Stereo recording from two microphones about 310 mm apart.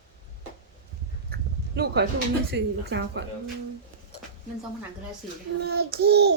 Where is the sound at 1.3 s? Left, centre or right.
Right.